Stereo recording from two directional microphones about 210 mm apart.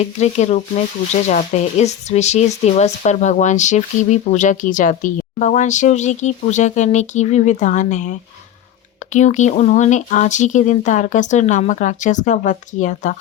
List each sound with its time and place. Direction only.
0.0 s speech: 30° left (ahead or behind)
9.1 s speech: 35° left (ahead or behind)